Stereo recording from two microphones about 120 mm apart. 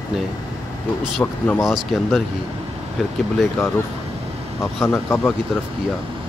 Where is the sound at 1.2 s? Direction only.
15° left (ahead or behind).